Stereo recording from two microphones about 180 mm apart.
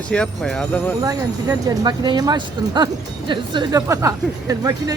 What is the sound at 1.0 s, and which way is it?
Speech, 20° right (ahead or behind).